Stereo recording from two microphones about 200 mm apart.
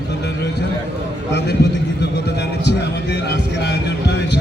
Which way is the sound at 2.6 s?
55° left (ahead or behind).